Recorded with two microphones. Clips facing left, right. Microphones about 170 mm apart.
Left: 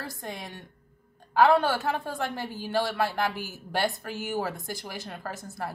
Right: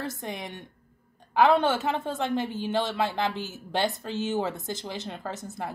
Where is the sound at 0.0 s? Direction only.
20° right (ahead or behind).